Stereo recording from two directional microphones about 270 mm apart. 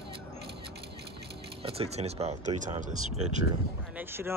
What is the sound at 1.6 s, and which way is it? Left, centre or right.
Speech, right.